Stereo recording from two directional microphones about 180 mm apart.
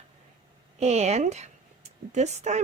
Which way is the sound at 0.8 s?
35° right (ahead or behind).